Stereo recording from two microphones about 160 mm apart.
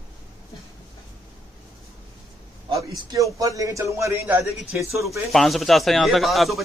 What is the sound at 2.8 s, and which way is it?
A man's voice, 20° right (ahead or behind).